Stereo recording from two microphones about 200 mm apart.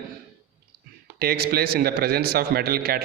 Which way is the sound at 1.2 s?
50° right (ahead or behind).